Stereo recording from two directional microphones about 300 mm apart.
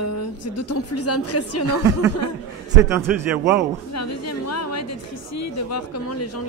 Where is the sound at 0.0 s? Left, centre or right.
Left.